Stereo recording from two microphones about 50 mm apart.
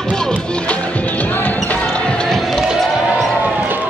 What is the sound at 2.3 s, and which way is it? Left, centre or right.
Basketball bounce, centre.